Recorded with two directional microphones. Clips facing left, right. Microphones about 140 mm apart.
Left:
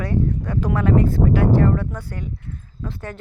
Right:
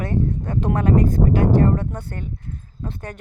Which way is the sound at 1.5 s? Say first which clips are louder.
Even; 25° right (ahead or behind).